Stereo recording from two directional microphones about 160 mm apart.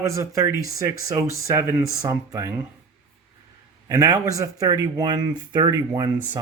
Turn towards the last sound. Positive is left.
turn(degrees=-25)  # may be behind; listen again after turning